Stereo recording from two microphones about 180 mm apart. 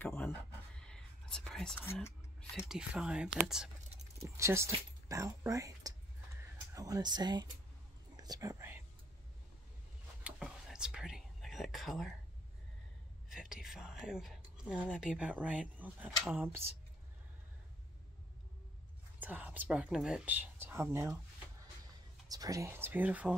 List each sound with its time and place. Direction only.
0.0 s whispering: 10° left (ahead or behind)
2.5 s speech: 5° right (ahead or behind)
4.2 s speech: 15° right (ahead or behind)
8.2 s whispering: 20° right (ahead or behind)
10.2 s whispering: 5° right (ahead or behind)
13.3 s speech: 5° right (ahead or behind)
19.1 s speech: 10° right (ahead or behind)
22.3 s speech: 20° right (ahead or behind)